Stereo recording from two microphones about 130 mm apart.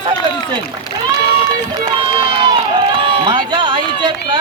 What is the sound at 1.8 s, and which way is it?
Speech, 40° right (ahead or behind).